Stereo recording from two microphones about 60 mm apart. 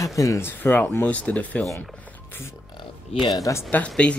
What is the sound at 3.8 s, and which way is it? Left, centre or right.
Speech, left.